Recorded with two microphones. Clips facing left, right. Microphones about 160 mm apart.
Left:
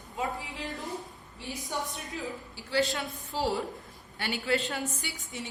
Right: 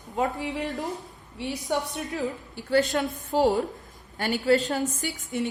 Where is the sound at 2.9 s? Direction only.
45° right (ahead or behind).